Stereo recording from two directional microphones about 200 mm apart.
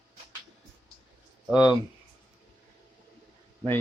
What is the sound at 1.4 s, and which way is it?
Speech, 5° right (ahead or behind).